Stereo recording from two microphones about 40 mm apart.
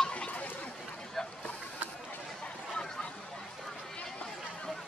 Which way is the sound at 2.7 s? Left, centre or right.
Left.